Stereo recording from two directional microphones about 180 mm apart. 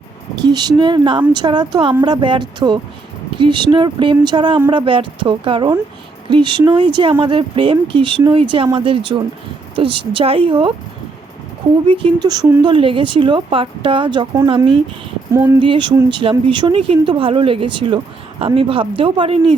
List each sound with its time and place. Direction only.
0.4 s speech: 25° right (ahead or behind)
11.9 s speech: 25° right (ahead or behind)
12.6 s speech: 30° right (ahead or behind)
15.3 s speech: 15° right (ahead or behind)
15.6 s speech: 25° right (ahead or behind)